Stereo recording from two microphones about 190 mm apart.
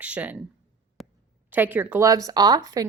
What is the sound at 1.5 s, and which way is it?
Speech, 10° right (ahead or behind).